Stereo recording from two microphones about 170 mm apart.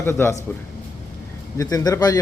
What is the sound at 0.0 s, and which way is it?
Speech, 15° left (ahead or behind).